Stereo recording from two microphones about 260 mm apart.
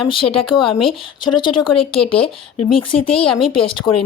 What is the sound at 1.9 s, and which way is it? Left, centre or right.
Speech, left.